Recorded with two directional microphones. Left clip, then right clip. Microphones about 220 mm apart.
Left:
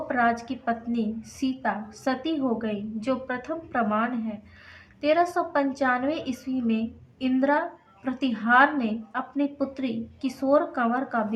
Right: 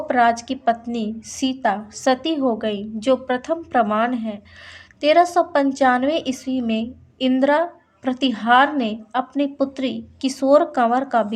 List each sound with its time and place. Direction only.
0.1 s a woman's voice: 40° right (ahead or behind)